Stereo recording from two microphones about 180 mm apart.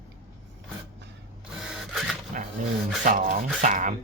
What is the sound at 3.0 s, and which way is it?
Speech, 45° right (ahead or behind).